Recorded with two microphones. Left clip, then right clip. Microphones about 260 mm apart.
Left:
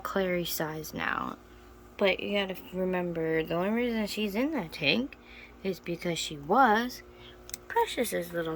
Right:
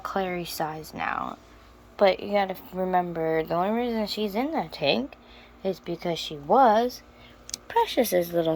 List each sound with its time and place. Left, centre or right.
0.2 s speech: centre
2.0 s speech: centre
7.9 s speech: centre